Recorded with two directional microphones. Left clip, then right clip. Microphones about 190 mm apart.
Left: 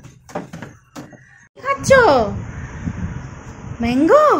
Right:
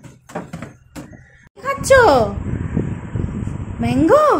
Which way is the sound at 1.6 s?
5° right (ahead or behind).